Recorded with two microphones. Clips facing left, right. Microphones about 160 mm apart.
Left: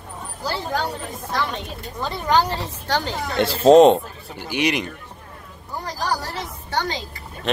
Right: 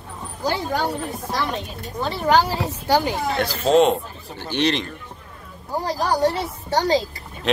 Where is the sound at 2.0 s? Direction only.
5° right (ahead or behind).